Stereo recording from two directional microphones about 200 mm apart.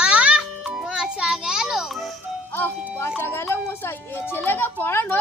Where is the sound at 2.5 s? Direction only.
10° left (ahead or behind).